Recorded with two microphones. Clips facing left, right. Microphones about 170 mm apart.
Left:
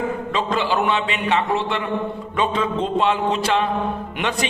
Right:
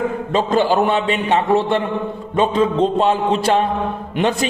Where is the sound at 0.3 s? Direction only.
40° right (ahead or behind).